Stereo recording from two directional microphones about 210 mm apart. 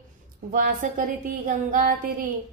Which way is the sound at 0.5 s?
40° right (ahead or behind).